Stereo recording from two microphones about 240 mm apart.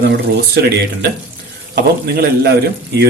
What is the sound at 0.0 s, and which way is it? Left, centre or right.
Speech, right.